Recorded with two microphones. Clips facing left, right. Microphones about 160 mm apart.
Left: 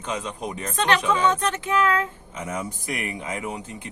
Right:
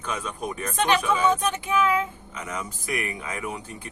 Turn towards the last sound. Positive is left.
turn(degrees=25)  # may be behind; listen again after turning